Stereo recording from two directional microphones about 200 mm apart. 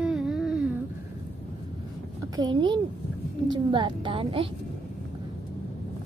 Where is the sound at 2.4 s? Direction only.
25° right (ahead or behind).